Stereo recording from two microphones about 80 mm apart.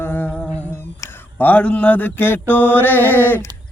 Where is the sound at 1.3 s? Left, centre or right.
Centre.